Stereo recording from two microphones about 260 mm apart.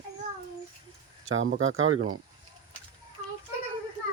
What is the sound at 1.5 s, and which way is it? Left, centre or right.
Speech, right.